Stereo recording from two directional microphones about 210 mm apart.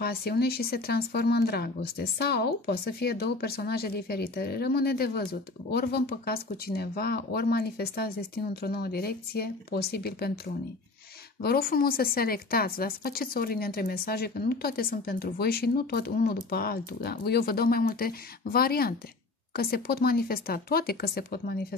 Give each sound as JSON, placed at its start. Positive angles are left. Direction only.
{"t": 0.0, "sound": "speech", "side_deg": 50}